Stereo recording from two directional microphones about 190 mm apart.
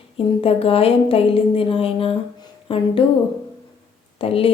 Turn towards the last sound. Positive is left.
turn(degrees=30)  # may be behind; listen again after turning